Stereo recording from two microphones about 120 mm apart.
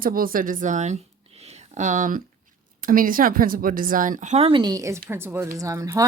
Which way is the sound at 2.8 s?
90° right.